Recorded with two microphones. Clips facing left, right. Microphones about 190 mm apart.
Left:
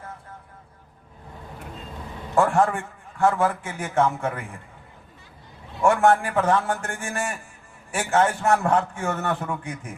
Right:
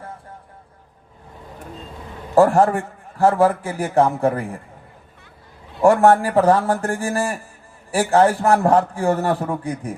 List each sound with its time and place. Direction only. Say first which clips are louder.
2.3 s a man's voice: right 6 dB; 35° right (ahead or behind)
5.8 s a man's voice: right 5 dB; 35° right (ahead or behind)